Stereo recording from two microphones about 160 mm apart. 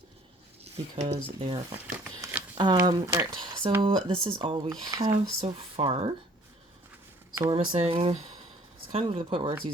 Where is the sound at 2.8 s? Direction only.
20° right (ahead or behind).